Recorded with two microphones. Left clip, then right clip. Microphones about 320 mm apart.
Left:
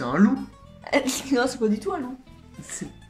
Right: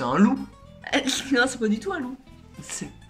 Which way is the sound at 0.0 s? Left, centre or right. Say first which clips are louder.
Right 1 dB; centre.